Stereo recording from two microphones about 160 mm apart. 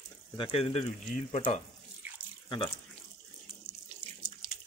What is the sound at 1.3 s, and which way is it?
Speech, 50° left (ahead or behind).